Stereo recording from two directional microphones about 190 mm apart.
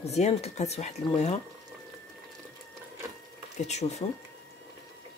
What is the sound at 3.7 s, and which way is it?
Speech, 35° left (ahead or behind).